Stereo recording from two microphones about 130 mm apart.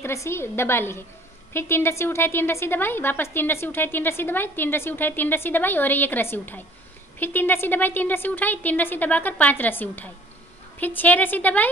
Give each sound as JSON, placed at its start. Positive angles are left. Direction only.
{"t": 0.0, "sound": "a woman's voice", "side_deg": 20}